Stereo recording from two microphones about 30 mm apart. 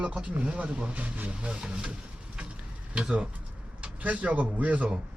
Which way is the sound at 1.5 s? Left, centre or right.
Right.